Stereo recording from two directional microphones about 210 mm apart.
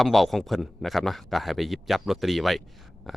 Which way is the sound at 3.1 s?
Centre (ahead or behind).